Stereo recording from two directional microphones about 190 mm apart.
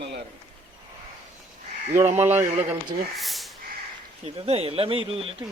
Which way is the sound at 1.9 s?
35° right (ahead or behind).